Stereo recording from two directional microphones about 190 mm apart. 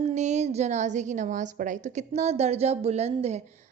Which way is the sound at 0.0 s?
35° right (ahead or behind).